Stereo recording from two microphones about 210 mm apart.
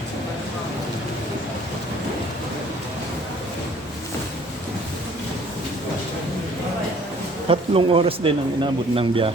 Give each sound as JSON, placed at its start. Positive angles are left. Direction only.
{"t": 7.4, "sound": "speech", "side_deg": -25}